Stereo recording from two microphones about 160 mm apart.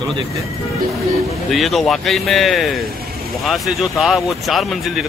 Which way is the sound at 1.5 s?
Centre (ahead or behind).